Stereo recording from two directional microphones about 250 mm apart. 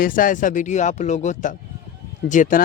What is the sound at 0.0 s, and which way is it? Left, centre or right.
A man's voice, left.